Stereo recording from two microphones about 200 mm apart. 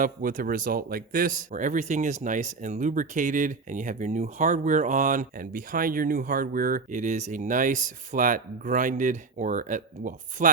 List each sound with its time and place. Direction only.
0.0 s speech: 40° right (ahead or behind)